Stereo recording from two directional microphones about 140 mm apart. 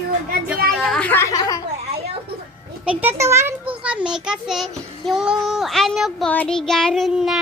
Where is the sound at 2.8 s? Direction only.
10° right (ahead or behind).